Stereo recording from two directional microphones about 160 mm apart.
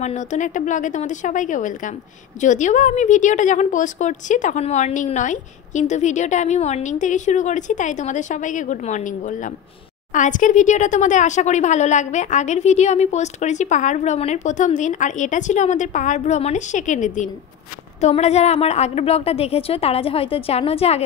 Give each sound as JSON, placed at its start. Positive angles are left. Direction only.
{"t": 0.0, "sound": "a woman's voice", "side_deg": 45}